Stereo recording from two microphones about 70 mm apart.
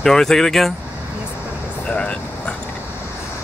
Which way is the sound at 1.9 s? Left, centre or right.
Centre.